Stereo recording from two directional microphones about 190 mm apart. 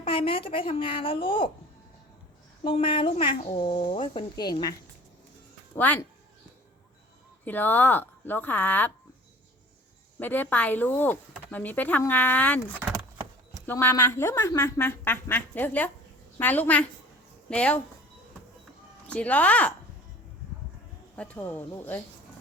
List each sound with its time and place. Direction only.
0.0 s speech: 25° left (ahead or behind)
2.6 s speech: 25° left (ahead or behind)
5.7 s speech: 10° left (ahead or behind)
7.4 s speech: 10° left (ahead or behind)
10.2 s speech: 10° left (ahead or behind)
12.8 s horse: 15° right (ahead or behind)
13.7 s speech: 10° left (ahead or behind)
19.0 s speech: 5° left (ahead or behind)
21.2 s speech: 10° left (ahead or behind)